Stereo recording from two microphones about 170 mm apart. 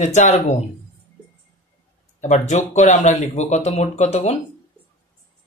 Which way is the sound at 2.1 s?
45° left (ahead or behind).